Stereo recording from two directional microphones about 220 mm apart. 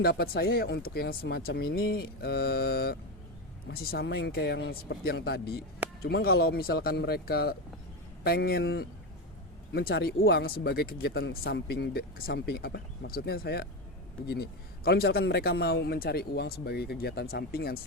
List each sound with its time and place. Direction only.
0.0 s speech: 45° left (ahead or behind)
14.8 s speech: 45° left (ahead or behind)